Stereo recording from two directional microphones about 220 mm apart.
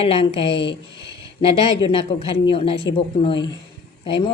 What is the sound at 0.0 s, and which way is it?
Speech, 25° left (ahead or behind).